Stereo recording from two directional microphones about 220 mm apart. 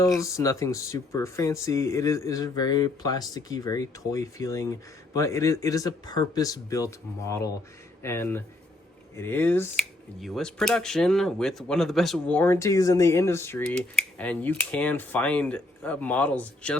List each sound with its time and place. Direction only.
0.2 s speech: 15° left (ahead or behind)